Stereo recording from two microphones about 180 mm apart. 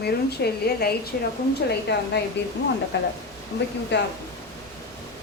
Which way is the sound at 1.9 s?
70° left (ahead or behind).